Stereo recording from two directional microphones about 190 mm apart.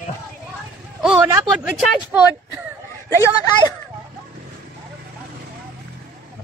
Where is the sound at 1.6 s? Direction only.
Centre (ahead or behind).